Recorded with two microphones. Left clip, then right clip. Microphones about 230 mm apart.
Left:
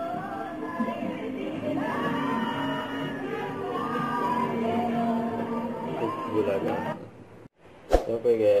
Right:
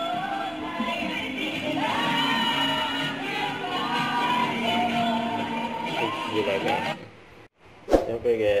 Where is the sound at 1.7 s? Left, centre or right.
Centre.